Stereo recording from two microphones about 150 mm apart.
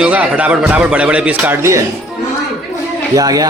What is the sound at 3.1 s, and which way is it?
Speech, 25° right (ahead or behind).